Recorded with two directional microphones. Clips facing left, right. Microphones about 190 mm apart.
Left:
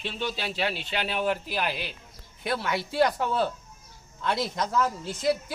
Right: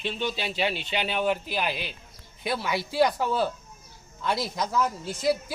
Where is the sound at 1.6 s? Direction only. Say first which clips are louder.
Right 1 dB; 15° right (ahead or behind).